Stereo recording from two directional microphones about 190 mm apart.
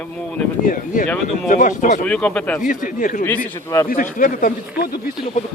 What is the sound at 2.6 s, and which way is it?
Speech, 45° left (ahead or behind).